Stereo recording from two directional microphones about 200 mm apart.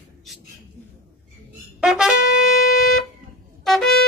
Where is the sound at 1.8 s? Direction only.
Centre (ahead or behind).